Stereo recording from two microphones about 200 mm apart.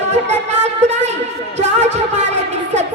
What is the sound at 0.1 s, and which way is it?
Music, 35° right (ahead or behind).